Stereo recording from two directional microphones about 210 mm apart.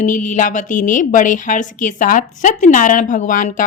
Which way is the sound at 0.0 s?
35° left (ahead or behind).